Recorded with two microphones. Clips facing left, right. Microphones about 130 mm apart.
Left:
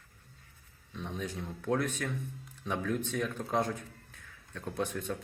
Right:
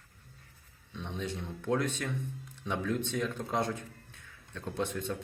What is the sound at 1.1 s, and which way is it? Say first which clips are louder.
Speech: right 2 dB; 25° right (ahead or behind).